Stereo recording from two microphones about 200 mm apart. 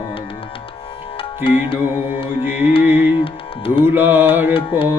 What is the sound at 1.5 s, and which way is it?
Speech, 25° left (ahead or behind).